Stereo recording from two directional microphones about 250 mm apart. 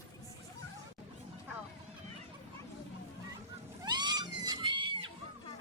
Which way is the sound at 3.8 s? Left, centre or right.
Centre.